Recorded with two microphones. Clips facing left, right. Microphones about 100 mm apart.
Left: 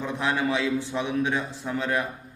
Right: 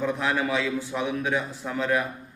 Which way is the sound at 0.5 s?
25° left (ahead or behind).